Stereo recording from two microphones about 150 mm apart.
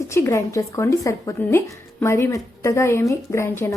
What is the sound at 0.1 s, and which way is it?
A woman's voice, 20° left (ahead or behind).